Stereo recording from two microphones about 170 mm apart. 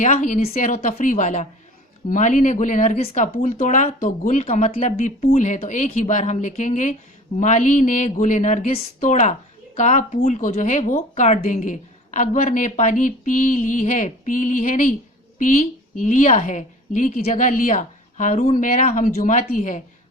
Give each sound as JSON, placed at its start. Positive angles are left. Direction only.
{"t": 0.0, "sound": "speech", "side_deg": 45}
{"t": 16.0, "sound": "speech", "side_deg": 50}